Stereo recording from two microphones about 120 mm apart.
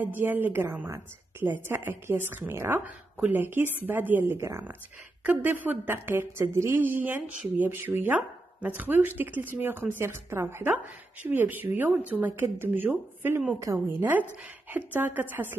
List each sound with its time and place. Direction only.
0.0 s a woman's voice: 15° right (ahead or behind)